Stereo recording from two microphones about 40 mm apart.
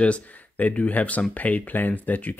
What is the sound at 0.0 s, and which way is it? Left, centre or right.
Speech, left.